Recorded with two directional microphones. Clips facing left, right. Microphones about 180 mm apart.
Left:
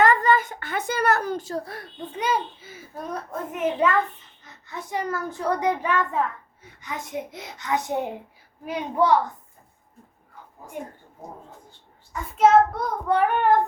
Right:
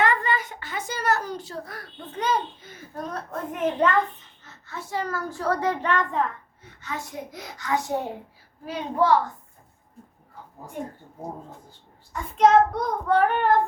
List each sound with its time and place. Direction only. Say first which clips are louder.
0.0 s a child's voice: left 5 dB; 45° left (ahead or behind)
1.6 s a child's voice: left 2 dB; 25° left (ahead or behind)
2.1 s a child's voice: even; 10° left (ahead or behind)
12.4 s a child's voice: even; 10° left (ahead or behind)